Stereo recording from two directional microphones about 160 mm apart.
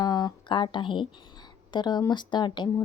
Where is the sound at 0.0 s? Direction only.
25° left (ahead or behind).